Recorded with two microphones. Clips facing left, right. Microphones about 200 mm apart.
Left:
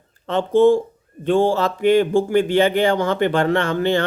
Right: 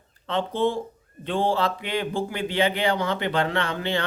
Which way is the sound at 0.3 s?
45° left (ahead or behind).